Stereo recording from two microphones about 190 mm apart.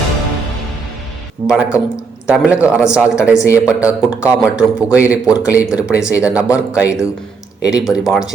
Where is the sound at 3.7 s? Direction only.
5° right (ahead or behind).